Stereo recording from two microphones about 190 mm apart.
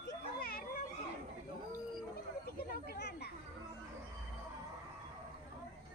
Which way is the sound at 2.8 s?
60° left (ahead or behind).